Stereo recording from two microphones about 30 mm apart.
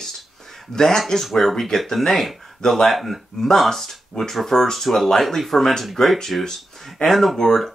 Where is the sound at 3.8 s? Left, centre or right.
Centre.